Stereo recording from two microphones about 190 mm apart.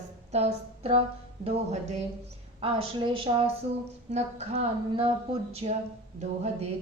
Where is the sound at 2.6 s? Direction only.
30° right (ahead or behind).